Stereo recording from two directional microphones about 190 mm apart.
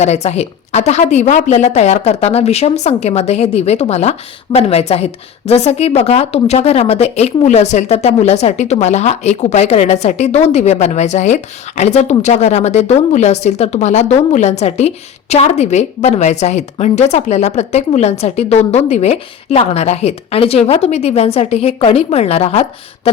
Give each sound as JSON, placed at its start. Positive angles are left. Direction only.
{"t": 0.0, "sound": "speech", "side_deg": 35}